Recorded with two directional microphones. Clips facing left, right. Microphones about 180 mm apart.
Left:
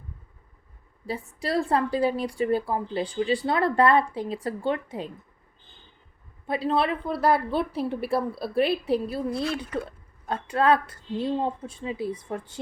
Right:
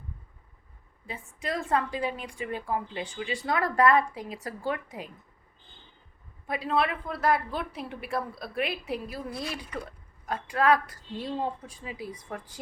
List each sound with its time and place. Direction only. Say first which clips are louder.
1.0 s a woman's voice: left 5 dB; 35° left (ahead or behind)
6.5 s a woman's voice: left 3 dB; 30° left (ahead or behind)